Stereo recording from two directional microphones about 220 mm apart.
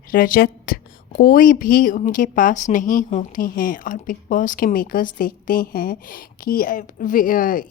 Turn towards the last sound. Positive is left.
turn(degrees=40)  # may be behind; listen again after turning